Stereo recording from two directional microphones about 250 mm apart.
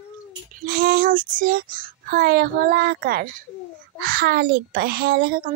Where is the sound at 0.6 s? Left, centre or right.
Right.